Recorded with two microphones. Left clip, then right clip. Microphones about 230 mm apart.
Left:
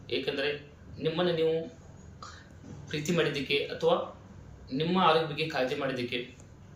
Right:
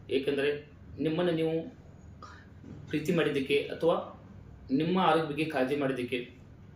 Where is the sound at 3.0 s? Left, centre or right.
Centre.